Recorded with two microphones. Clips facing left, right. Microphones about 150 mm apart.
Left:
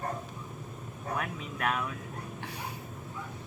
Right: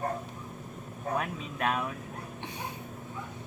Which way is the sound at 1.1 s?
25° right (ahead or behind).